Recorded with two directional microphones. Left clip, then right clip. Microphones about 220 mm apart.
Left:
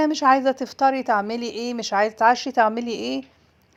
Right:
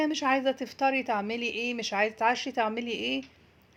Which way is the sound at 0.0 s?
30° left (ahead or behind).